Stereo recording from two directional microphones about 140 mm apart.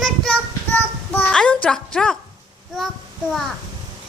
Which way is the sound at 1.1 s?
10° left (ahead or behind).